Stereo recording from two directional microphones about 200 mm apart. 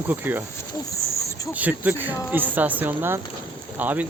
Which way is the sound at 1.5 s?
10° right (ahead or behind).